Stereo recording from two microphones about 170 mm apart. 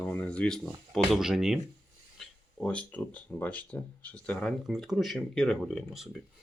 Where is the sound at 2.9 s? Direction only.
10° left (ahead or behind).